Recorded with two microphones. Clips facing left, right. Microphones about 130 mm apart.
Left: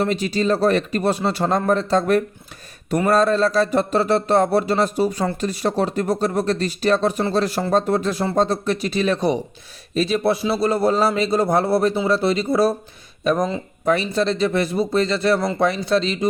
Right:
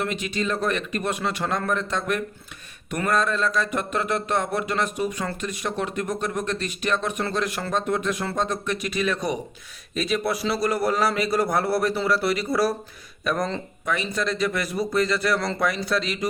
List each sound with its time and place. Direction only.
0.0 s a man's voice: 35° left (ahead or behind)
13.8 s a man's voice: 35° left (ahead or behind)